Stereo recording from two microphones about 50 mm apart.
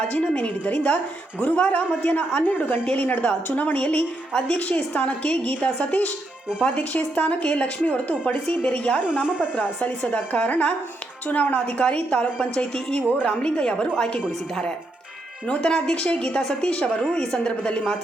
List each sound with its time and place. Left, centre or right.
0.1 s a woman's voice: left
4.9 s a woman's voice: left
7.9 s a woman's voice: left
9.2 s speech: right
10.1 s a woman's voice: left
15.4 s a woman's voice: centre
17.0 s a woman's voice: centre